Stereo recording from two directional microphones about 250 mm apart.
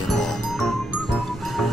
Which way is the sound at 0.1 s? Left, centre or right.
Centre.